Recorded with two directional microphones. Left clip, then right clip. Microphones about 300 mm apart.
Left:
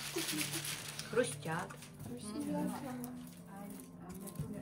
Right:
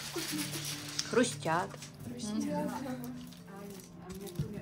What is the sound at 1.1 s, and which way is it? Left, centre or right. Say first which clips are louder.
Speech: right 5 dB; centre.